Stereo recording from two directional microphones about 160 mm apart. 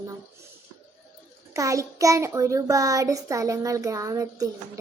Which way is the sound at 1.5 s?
20° right (ahead or behind).